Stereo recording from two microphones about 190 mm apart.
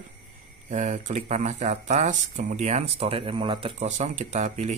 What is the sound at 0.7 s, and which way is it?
A man's voice, 40° right (ahead or behind).